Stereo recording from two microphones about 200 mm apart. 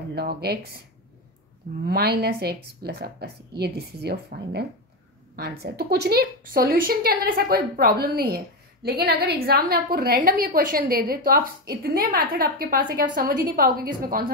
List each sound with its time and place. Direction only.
0.1 s a woman's voice: 55° right (ahead or behind)
1.9 s a woman's voice: 50° right (ahead or behind)